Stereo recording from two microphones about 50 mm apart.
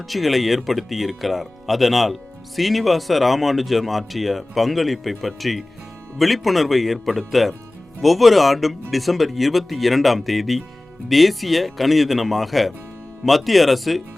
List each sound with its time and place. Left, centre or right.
0.1 s speech: centre